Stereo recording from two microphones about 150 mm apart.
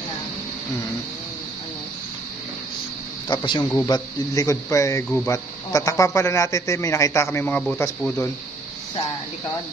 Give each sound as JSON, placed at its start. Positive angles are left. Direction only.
{"t": 3.3, "sound": "a man's voice", "side_deg": 30}
{"t": 3.6, "sound": "speech", "side_deg": 20}